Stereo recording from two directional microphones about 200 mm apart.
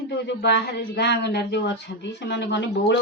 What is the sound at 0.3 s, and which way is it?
A woman's voice, 55° left (ahead or behind).